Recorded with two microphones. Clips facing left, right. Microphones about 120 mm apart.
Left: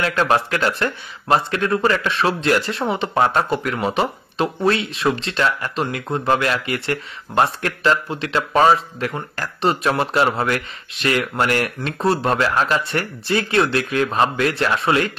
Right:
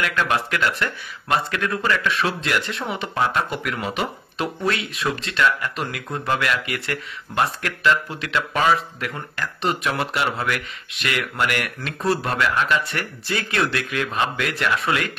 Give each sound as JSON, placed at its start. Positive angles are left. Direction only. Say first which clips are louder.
{"t": 0.0, "sound": "speech", "louder": "left 4 dB", "side_deg": 35}